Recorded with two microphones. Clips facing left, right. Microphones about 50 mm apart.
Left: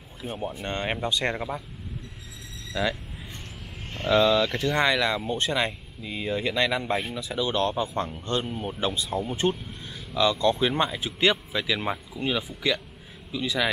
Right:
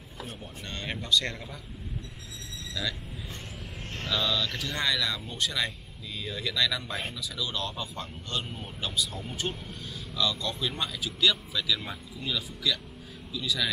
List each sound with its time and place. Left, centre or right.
0.4 s speech: left
2.7 s speech: left
4.1 s speech: left
4.5 s speech: left